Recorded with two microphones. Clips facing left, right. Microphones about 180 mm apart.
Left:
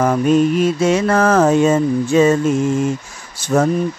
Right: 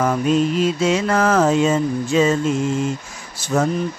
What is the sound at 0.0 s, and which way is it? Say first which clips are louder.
Mantra: left 4 dB; 50° left (ahead or behind).